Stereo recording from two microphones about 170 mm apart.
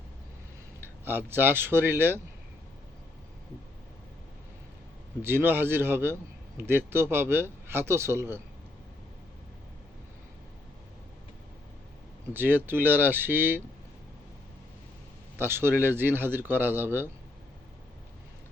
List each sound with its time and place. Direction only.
1.0 s a man's voice: 10° right (ahead or behind)
5.2 s a man's voice: 10° right (ahead or behind)
12.3 s a man's voice: 10° right (ahead or behind)
15.4 s a man's voice: 15° right (ahead or behind)